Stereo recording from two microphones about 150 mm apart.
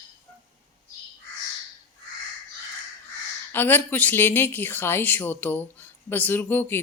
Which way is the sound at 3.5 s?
15° left (ahead or behind).